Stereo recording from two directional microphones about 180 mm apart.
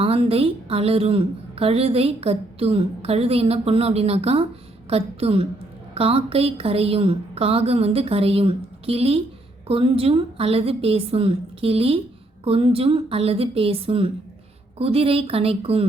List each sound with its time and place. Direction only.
0.0 s a woman's voice: 30° right (ahead or behind)